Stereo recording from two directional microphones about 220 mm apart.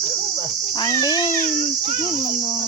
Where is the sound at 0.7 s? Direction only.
20° left (ahead or behind).